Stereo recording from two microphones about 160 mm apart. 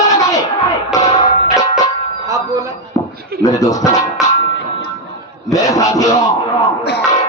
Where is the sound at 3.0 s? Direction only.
20° left (ahead or behind).